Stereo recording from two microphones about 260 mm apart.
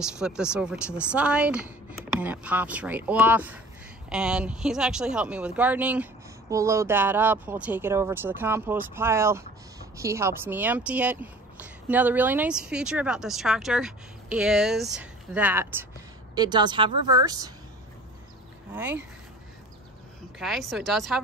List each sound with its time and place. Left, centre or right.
0.0 s a woman's voice: centre
18.7 s speech: centre
20.3 s speech: centre